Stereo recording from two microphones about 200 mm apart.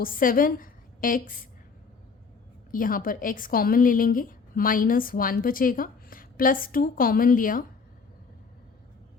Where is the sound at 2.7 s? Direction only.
45° left (ahead or behind).